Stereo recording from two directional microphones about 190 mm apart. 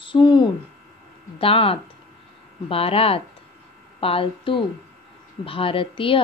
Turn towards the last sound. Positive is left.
turn(degrees=30)  # may be behind; listen again after turning